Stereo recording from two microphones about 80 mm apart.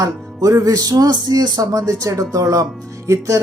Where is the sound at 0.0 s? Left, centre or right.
Right.